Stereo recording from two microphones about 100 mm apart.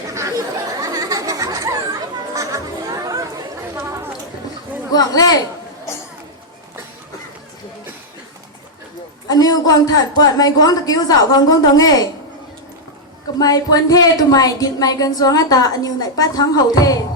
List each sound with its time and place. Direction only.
0.1 s chatter: 30° right (ahead or behind)
4.9 s speech: 40° left (ahead or behind)
9.3 s speech: 40° left (ahead or behind)
13.4 s speech: 40° left (ahead or behind)